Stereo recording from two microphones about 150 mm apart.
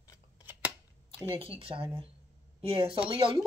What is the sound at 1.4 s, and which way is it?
Speech, 35° right (ahead or behind).